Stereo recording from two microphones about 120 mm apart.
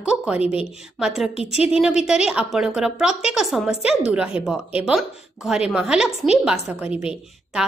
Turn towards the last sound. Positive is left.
turn(degrees=-5)  # may be behind; listen again after turning